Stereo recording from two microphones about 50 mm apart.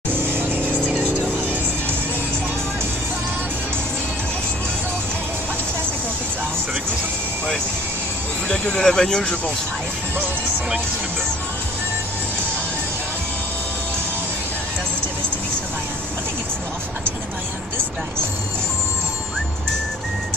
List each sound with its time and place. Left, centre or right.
0.1 s vehicle: right
8.7 s speech: centre